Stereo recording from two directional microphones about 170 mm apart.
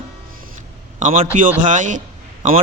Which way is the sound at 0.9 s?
45° right (ahead or behind).